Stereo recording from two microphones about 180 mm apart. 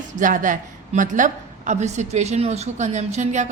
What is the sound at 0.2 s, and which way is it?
A woman's voice, 45° right (ahead or behind).